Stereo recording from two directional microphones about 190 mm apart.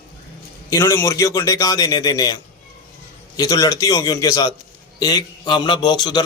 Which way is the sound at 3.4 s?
20° left (ahead or behind).